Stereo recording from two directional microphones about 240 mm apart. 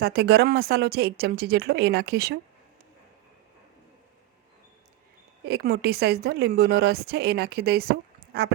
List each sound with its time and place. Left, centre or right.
0.0 s speech: right
5.5 s speech: right